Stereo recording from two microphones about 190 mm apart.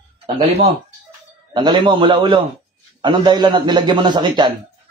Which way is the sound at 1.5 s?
25° right (ahead or behind).